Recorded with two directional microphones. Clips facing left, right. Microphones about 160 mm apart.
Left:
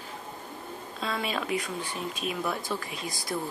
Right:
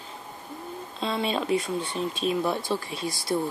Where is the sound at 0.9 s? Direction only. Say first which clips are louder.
Right 4 dB; 25° right (ahead or behind).